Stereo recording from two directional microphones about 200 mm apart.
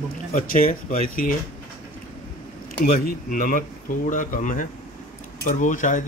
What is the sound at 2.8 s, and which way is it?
Speech, 45° left (ahead or behind).